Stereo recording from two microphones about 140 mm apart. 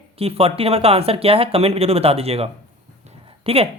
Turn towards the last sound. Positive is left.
turn(degrees=-45)  # may be behind; listen again after turning